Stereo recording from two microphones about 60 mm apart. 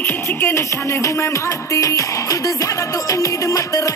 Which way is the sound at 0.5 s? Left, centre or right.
Left.